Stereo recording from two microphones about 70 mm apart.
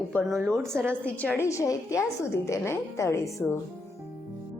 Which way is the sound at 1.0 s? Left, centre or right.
Left.